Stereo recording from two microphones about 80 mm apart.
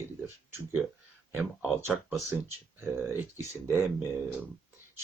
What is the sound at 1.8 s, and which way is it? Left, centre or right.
Speech, right.